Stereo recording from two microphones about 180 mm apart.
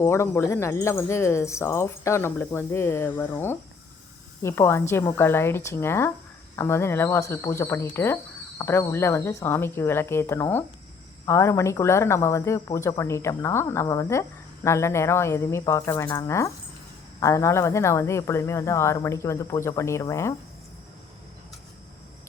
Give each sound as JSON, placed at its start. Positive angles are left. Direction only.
{"t": 0.0, "sound": "speech", "side_deg": 15}